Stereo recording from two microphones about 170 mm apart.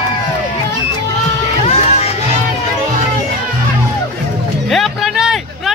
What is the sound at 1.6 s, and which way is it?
Music, 40° left (ahead or behind).